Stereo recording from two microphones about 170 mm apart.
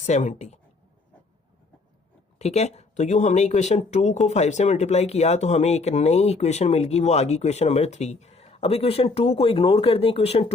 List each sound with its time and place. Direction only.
0.0 s a woman's voice: 45° left (ahead or behind)
2.4 s speech: 40° left (ahead or behind)